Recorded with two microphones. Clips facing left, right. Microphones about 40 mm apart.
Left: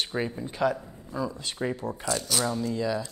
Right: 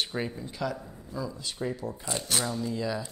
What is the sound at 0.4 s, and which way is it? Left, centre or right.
Speech, left.